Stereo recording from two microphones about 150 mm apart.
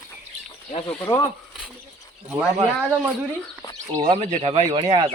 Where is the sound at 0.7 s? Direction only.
40° left (ahead or behind).